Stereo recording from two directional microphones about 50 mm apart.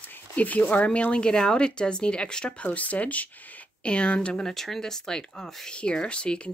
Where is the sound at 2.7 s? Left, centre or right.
Left.